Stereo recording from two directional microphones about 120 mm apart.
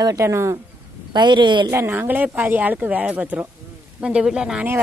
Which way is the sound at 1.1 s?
40° right (ahead or behind).